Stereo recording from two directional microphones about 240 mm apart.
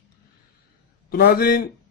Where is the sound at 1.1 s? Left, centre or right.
Left.